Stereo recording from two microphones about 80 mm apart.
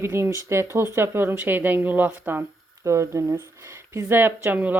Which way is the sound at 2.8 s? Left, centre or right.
Right.